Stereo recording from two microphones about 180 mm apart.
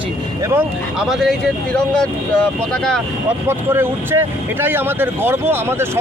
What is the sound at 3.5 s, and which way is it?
Speech, 15° right (ahead or behind).